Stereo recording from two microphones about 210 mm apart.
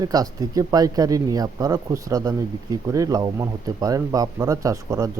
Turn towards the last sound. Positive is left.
turn(degrees=-15)  # may be behind; listen again after turning